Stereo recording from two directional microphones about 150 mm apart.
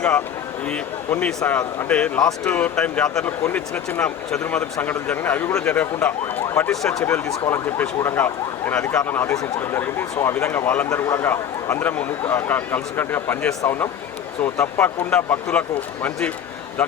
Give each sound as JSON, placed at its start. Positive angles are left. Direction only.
{"t": 0.7, "sound": "speech", "side_deg": 10}